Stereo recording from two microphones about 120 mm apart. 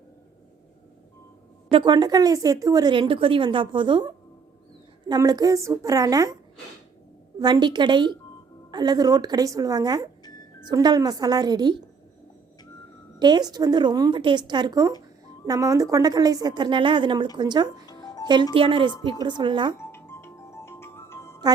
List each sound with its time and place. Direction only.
1.7 s a woman's voice: 35° right (ahead or behind)
2.9 s a woman's voice: 45° right (ahead or behind); by 6.3 s 30° right (ahead or behind)
7.3 s a woman's voice: 35° right (ahead or behind)
13.1 s a woman's voice: 40° right (ahead or behind)
17.8 s music: 35° left (ahead or behind)
18.5 s a woman's voice: 45° right (ahead or behind)
19.8 s music: 20° left (ahead or behind)